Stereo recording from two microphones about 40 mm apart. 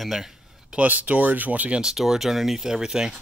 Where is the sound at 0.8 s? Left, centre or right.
Right.